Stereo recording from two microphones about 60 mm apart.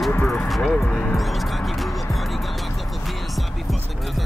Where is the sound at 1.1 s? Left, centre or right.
Centre.